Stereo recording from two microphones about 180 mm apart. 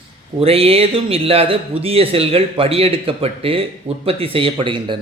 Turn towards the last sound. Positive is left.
turn(degrees=-30)  # may be behind; listen again after turning